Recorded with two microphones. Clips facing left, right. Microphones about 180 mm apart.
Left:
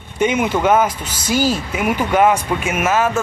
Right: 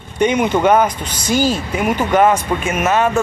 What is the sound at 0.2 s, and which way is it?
Speech, 5° left (ahead or behind).